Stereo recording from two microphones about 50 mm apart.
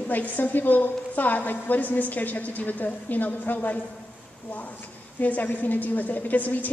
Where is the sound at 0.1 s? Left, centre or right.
Left.